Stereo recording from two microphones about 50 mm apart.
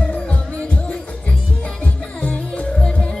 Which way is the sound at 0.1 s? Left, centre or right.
Left.